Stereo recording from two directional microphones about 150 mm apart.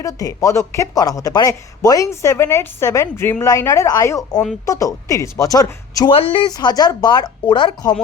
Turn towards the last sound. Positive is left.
turn(degrees=30)  # may be behind; listen again after turning